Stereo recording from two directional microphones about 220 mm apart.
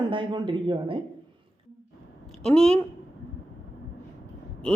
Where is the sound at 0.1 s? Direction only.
20° right (ahead or behind).